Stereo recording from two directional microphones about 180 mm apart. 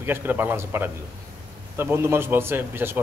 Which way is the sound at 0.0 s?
10° right (ahead or behind).